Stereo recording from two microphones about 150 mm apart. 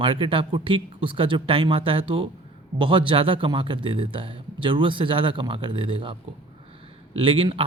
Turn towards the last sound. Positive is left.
turn(degrees=-35)  # may be behind; listen again after turning